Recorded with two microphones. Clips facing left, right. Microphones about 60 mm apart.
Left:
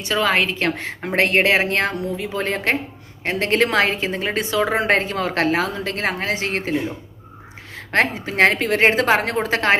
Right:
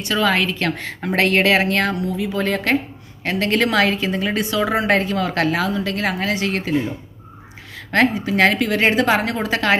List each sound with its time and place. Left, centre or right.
0.0 s a woman's voice: left
7.8 s a woman's voice: left